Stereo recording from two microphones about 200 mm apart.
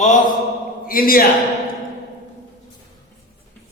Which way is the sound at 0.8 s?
45° left (ahead or behind).